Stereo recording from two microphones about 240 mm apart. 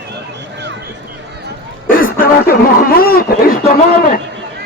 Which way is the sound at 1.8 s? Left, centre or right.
Left.